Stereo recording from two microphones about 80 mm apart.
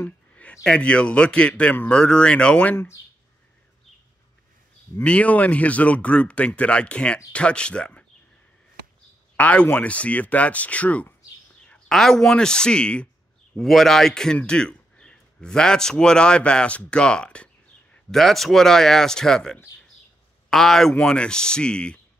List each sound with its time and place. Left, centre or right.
0.7 s a man's voice: centre
5.0 s a man's voice: centre
9.4 s a man's voice: centre
11.9 s a man's voice: centre
18.1 s a man's voice: centre